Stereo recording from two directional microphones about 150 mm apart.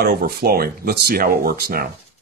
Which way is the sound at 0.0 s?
90° right.